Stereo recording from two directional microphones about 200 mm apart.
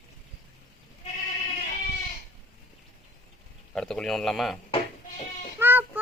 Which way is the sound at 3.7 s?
5° left (ahead or behind).